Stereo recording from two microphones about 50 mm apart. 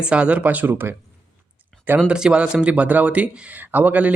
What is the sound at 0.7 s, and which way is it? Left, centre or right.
Speech, right.